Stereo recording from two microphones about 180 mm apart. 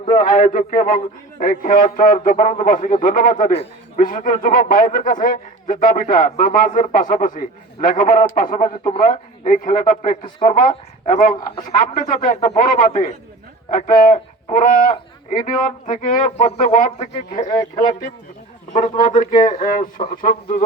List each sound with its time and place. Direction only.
0.1 s a man's voice: 45° left (ahead or behind)
19.5 s a man's voice: 50° left (ahead or behind)